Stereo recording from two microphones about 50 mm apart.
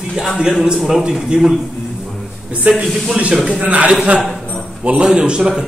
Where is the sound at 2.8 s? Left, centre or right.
Centre.